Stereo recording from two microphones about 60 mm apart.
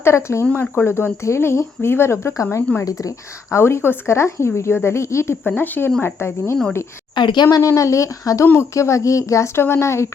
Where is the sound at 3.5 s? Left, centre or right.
Left.